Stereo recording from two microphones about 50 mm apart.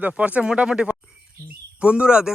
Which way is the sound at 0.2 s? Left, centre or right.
Right.